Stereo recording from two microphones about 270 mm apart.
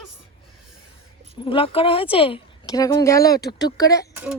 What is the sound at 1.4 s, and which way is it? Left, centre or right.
A woman's voice, centre.